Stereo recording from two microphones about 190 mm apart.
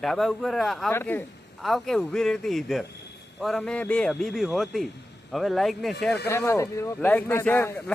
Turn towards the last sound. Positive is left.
turn(degrees=10)  # may be behind; listen again after turning